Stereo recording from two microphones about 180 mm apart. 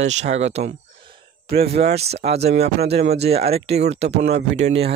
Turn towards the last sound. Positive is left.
turn(degrees=-35)  # may be behind; listen again after turning